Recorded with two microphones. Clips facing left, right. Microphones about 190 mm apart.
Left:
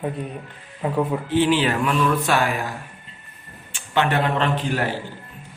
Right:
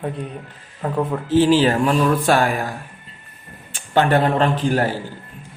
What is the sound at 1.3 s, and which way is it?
A man's voice, 40° right (ahead or behind).